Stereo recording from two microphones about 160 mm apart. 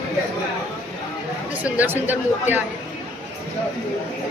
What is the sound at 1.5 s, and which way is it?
Speech, 10° right (ahead or behind).